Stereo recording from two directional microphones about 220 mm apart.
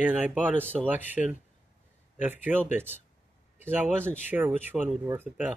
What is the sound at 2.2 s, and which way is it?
Speech, 10° right (ahead or behind).